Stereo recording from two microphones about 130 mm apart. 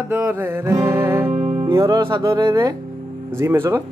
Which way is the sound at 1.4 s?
45° right (ahead or behind).